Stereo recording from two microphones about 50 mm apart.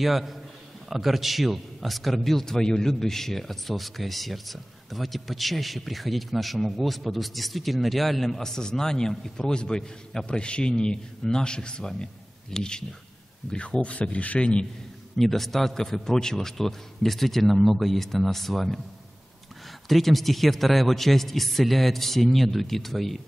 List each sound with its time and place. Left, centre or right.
0.0 s speech: centre; by 14.7 s left
15.1 s speech: centre
19.9 s speech: centre